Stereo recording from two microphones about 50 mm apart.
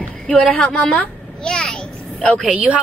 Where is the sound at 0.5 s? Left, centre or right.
Left.